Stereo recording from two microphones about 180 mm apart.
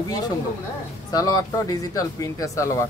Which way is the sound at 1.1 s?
20° left (ahead or behind).